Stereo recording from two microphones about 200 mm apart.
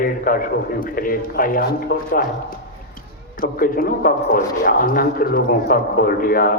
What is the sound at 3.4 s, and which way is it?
A man's voice, 45° left (ahead or behind).